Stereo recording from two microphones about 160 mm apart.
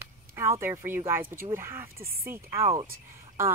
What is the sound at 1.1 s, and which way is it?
Speech, 15° right (ahead or behind).